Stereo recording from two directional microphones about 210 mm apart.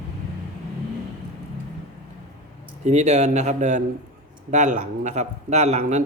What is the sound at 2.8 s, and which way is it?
A man's voice, 30° right (ahead or behind).